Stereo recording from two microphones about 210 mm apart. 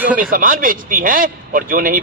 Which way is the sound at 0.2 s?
40° right (ahead or behind).